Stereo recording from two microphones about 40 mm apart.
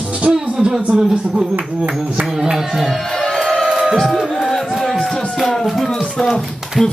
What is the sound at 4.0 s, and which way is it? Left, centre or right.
Music, centre.